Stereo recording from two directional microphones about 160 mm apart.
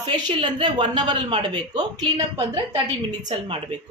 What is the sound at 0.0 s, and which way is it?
Speech, 30° right (ahead or behind).